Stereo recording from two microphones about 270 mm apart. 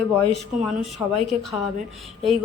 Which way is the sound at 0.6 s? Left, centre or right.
Centre.